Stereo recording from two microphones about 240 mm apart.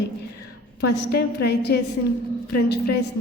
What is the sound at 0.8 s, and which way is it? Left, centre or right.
A woman's voice, left.